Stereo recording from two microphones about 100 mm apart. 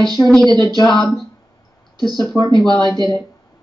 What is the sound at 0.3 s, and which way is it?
Speech, 5° left (ahead or behind).